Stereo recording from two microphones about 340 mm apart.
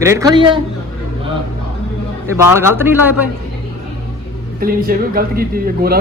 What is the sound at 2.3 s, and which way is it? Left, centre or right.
Speech, centre.